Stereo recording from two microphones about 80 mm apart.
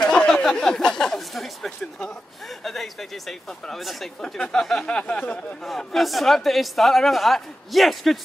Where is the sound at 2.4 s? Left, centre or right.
Centre.